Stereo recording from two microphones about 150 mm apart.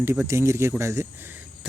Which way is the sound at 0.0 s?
15° right (ahead or behind).